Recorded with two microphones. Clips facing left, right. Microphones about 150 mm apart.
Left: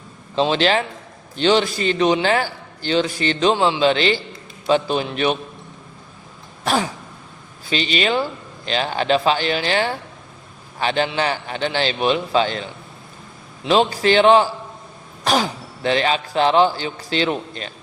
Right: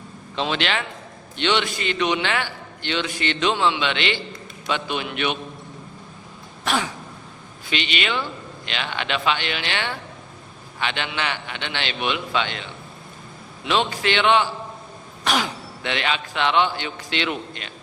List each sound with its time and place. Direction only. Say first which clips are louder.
0.3 s a man's voice: left 7 dB; 35° left (ahead or behind)
6.7 s a man's voice: left 4 dB; 35° left (ahead or behind)